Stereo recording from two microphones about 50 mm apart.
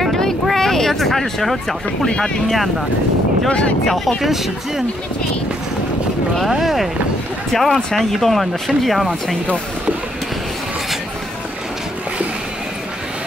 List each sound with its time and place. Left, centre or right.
0.0 s vehicle: centre
2.0 s speech: centre
3.8 s speech: centre
6.6 s speech: centre